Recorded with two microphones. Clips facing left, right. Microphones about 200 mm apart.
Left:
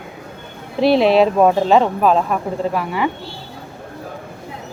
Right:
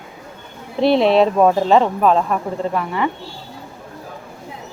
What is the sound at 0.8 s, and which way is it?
Speech, 5° left (ahead or behind).